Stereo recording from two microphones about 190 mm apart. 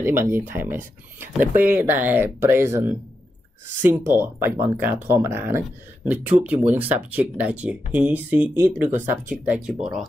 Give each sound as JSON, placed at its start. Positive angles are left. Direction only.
{"t": 0.0, "sound": "speech", "side_deg": -10}